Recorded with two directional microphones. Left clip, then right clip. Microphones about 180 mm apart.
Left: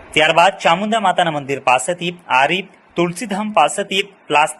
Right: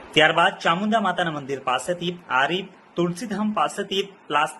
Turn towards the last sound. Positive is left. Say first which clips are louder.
# left 7 dB
turn(degrees=20)  # may be behind; listen again after turning